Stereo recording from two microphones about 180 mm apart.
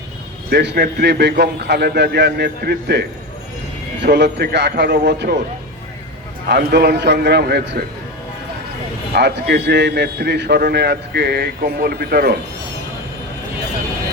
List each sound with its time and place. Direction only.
0.5 s a man's voice: 70° right (ahead or behind)
6.5 s a man's voice: 60° right (ahead or behind)
9.1 s a man's voice: 70° right (ahead or behind)